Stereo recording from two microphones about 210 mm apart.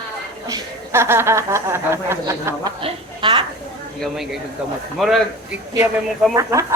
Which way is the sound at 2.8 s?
25° right (ahead or behind).